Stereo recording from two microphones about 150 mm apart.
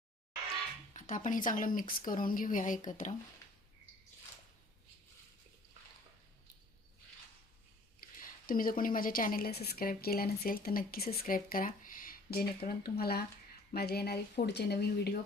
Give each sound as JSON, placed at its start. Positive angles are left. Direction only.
{"t": 0.9, "sound": "speech", "side_deg": 60}
{"t": 8.0, "sound": "a woman's voice", "side_deg": 70}